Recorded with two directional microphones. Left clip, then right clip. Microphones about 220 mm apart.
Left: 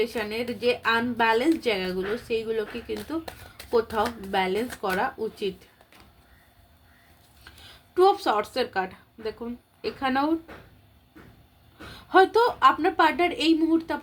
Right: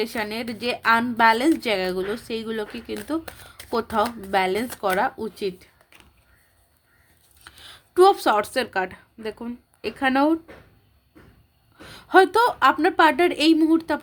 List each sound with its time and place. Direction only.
0.0 s a woman's voice: 50° right (ahead or behind)
7.4 s speech: 50° right (ahead or behind)
11.9 s a woman's voice: 50° right (ahead or behind)